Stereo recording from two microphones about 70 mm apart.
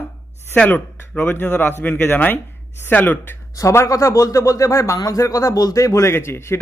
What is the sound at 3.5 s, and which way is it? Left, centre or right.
A man's voice, left.